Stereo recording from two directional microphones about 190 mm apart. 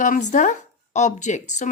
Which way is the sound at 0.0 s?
40° left (ahead or behind).